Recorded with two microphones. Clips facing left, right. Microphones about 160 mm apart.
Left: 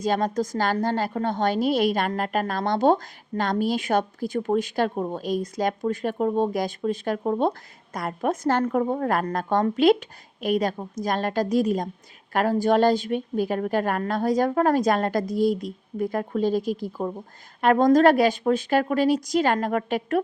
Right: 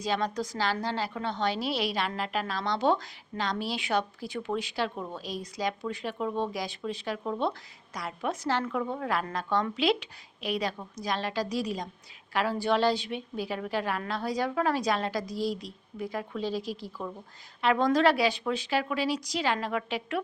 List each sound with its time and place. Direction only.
0.0 s a woman's voice: 50° left (ahead or behind)